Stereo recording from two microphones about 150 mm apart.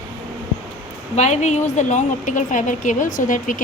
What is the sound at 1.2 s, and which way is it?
A woman's voice, 50° left (ahead or behind).